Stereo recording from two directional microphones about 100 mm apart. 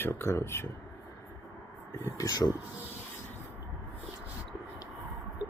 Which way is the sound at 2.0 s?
40° left (ahead or behind).